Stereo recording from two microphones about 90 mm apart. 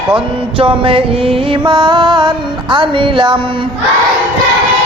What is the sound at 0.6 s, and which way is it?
Music, 75° right (ahead or behind).